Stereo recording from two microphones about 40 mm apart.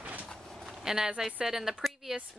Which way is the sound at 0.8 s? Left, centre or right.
Centre.